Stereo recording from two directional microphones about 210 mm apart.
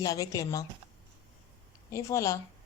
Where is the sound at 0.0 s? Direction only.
15° left (ahead or behind).